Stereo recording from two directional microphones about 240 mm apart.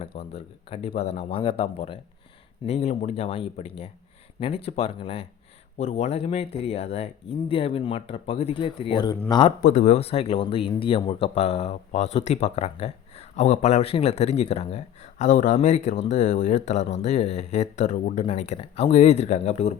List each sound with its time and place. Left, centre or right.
0.2 s speech: left
9.6 s speech: left